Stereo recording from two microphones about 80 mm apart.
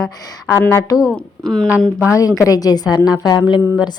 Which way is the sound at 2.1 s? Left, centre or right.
Left.